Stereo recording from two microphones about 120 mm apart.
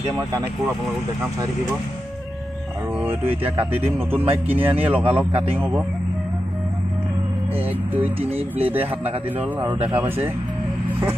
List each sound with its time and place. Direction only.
3.0 s speech: 15° right (ahead or behind)
8.5 s speech: 15° right (ahead or behind)
9.8 s speech: 20° right (ahead or behind)